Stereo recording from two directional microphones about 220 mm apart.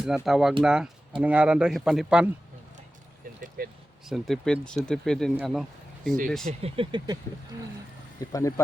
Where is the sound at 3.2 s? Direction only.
40° right (ahead or behind).